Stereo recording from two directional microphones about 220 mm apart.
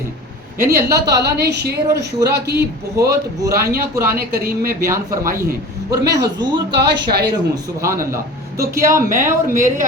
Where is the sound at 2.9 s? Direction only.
15° right (ahead or behind).